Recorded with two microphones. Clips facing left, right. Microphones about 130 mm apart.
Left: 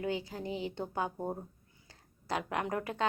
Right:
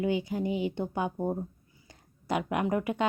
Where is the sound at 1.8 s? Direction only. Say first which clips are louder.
Right 6 dB; 15° right (ahead or behind).